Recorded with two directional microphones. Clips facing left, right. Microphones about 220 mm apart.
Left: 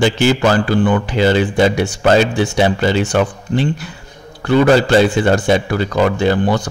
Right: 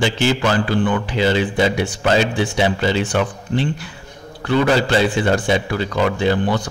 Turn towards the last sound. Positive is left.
turn(degrees=45)  # may be behind; listen again after turning